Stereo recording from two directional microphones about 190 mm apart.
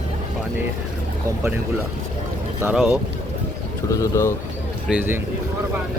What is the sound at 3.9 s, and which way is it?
Speech, 15° left (ahead or behind).